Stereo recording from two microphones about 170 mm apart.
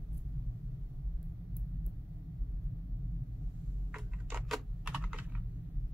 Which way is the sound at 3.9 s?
5° right (ahead or behind).